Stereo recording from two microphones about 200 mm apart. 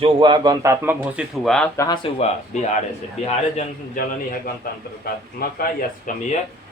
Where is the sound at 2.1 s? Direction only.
35° left (ahead or behind).